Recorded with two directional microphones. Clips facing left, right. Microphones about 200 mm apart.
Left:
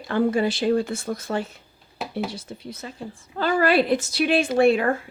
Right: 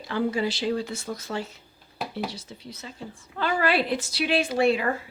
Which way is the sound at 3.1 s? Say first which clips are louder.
Left 5 dB; 40° left (ahead or behind).